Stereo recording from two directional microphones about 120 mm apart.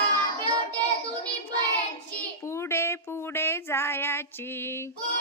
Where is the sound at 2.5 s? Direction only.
20° left (ahead or behind).